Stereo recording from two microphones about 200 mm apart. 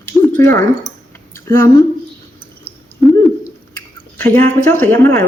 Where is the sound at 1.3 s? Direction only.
15° left (ahead or behind).